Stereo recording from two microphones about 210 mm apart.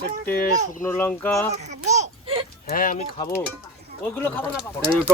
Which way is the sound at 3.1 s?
15° left (ahead or behind).